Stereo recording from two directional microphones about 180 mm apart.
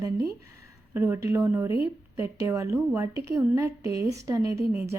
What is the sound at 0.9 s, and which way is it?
Speech, 15° right (ahead or behind).